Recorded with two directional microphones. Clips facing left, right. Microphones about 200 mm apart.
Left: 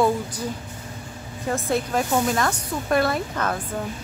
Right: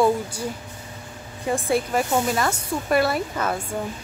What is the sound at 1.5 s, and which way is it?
Speech, 15° right (ahead or behind).